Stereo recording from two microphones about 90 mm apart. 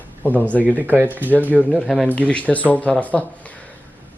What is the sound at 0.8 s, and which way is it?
Speech, 20° right (ahead or behind).